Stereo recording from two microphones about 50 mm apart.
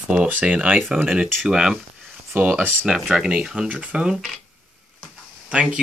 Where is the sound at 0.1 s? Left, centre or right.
Right.